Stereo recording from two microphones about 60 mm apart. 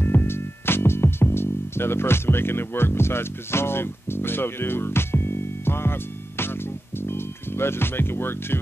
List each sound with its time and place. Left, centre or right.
0.0 s music: left